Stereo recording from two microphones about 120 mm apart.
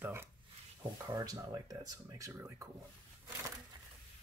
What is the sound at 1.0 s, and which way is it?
Speech, 30° right (ahead or behind).